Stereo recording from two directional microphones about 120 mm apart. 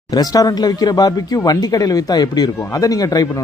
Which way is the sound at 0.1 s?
30° left (ahead or behind).